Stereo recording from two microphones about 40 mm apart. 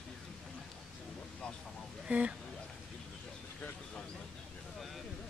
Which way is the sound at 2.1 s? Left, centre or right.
Right.